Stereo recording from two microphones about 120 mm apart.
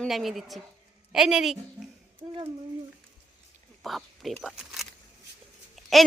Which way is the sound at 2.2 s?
25° right (ahead or behind).